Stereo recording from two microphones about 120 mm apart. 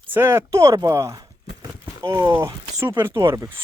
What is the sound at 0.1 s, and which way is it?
Speech, 20° right (ahead or behind).